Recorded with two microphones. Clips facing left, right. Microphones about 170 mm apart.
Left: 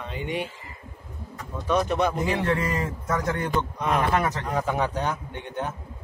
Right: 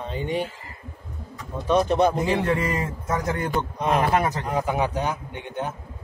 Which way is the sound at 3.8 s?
25° right (ahead or behind).